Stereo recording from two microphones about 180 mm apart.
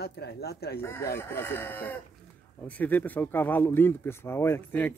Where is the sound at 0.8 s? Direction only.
15° left (ahead or behind).